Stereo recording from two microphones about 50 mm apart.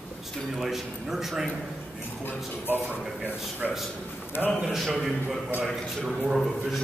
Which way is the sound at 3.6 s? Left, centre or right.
Centre.